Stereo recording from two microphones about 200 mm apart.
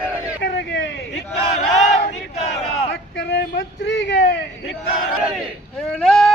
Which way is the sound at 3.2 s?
60° left (ahead or behind).